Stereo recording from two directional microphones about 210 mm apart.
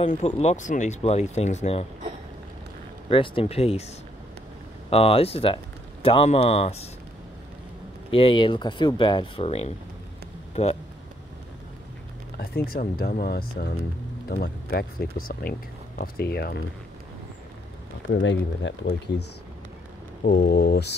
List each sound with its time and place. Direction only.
0.0 s speech: 30° left (ahead or behind)
3.1 s speech: 25° left (ahead or behind)
4.8 s speech: 25° left (ahead or behind)
8.1 s speech: 25° left (ahead or behind)
12.4 s speech: 45° left (ahead or behind)
18.0 s speech: 60° left (ahead or behind)
20.2 s speech: 45° left (ahead or behind)